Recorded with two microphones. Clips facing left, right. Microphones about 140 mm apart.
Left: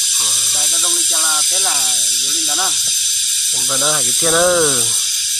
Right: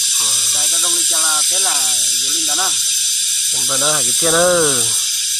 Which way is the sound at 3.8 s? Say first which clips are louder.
Right 1 dB; centre (ahead or behind).